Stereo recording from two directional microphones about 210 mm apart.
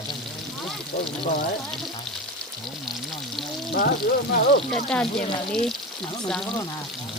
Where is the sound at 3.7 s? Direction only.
50° left (ahead or behind).